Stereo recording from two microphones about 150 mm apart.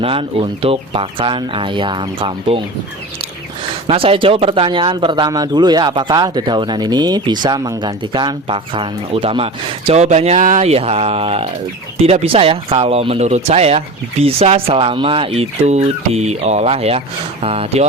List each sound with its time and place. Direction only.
0.0 s speech: 40° right (ahead or behind)
3.8 s speech: 40° right (ahead or behind)